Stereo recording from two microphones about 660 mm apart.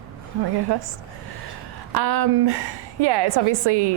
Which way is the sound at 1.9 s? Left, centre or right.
Right.